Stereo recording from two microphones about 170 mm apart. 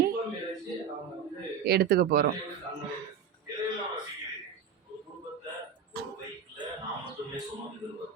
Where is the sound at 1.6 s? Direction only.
70° right (ahead or behind).